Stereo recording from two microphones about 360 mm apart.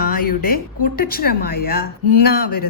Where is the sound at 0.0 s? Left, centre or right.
Left.